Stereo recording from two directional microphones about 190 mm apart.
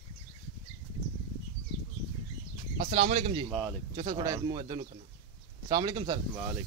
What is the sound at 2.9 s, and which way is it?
Speech, 30° right (ahead or behind).